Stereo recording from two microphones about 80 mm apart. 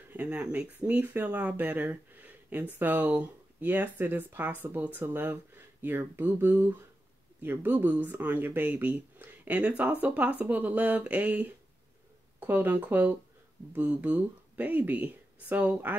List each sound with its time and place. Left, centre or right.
0.1 s speech: centre